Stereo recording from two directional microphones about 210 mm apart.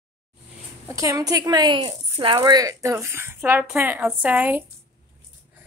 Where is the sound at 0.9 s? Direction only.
15° right (ahead or behind).